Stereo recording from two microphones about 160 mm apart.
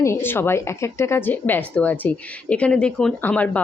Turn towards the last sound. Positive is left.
turn(degrees=10)  # may be behind; listen again after turning